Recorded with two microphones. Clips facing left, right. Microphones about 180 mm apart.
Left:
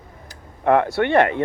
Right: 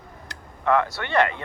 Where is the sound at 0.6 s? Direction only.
55° left (ahead or behind).